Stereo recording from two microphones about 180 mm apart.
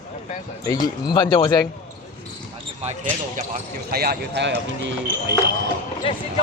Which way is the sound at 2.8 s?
45° right (ahead or behind).